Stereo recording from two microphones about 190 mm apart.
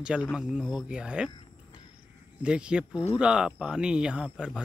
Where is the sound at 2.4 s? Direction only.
5° right (ahead or behind).